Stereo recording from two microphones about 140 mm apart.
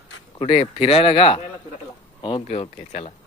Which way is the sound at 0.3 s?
40° left (ahead or behind).